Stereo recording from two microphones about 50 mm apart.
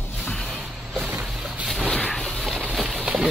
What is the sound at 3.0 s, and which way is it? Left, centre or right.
Boat, right.